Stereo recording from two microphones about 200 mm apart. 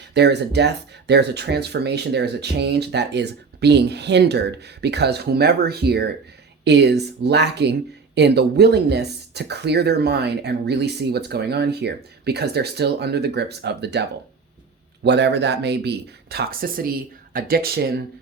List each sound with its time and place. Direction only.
0.1 s speech: 55° right (ahead or behind)
15.0 s speech: 60° right (ahead or behind)